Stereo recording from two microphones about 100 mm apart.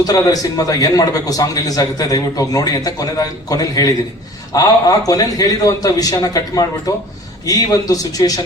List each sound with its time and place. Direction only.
0.0 s a man's voice: 40° left (ahead or behind)